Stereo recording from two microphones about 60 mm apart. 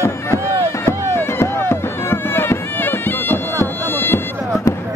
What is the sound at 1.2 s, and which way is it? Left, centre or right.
Music, left.